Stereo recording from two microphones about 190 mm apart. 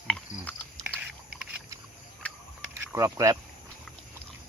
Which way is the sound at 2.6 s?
15° right (ahead or behind).